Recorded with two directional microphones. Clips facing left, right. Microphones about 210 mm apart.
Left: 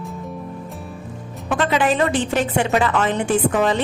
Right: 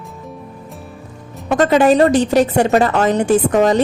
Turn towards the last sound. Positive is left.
turn(degrees=-40)  # may be behind; listen again after turning